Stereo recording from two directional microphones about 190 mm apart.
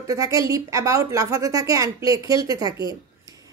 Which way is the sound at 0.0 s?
20° right (ahead or behind).